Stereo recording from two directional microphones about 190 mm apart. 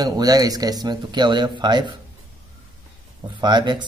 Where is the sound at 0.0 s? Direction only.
20° right (ahead or behind).